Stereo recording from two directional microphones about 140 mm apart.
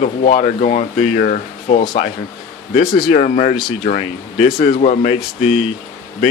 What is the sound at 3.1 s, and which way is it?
Speech, 60° left (ahead or behind).